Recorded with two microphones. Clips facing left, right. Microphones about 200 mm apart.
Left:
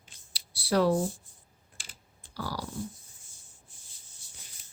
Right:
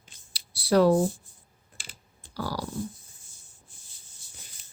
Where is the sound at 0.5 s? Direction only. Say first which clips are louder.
Right 5 dB; 45° right (ahead or behind).